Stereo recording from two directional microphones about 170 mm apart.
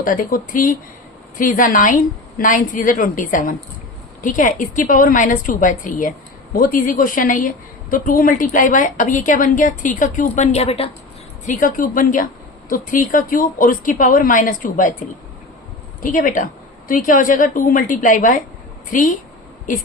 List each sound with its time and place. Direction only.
0.0 s a woman's voice: 50° left (ahead or behind); by 10.8 s 35° left (ahead or behind)
11.4 s a woman's voice: 50° left (ahead or behind)
16.0 s a woman's voice: 50° left (ahead or behind)